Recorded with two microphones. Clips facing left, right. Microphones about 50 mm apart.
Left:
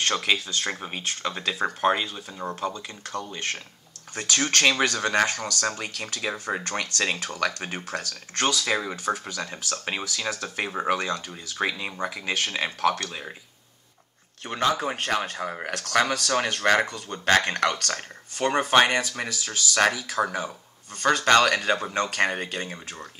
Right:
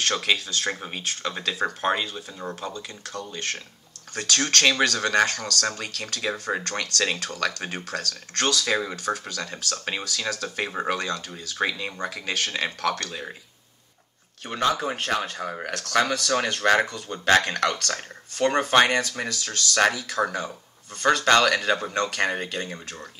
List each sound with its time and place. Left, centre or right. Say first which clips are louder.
0.1 s speech: even; centre
0.7 s speech: right 2 dB; centre
0.9 s speech: even; centre
2.6 s speech: left 3 dB; left
14.5 s speech: even; centre; by 22.8 s left